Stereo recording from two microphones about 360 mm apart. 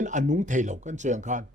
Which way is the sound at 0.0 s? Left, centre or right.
Right.